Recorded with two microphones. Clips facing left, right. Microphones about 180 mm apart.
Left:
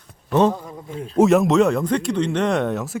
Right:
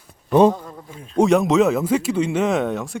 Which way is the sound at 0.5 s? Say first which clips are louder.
Left 4 dB; 10° left (ahead or behind).